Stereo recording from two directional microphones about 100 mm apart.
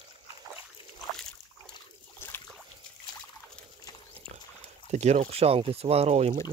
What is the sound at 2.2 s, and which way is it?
Boat, 25° left (ahead or behind).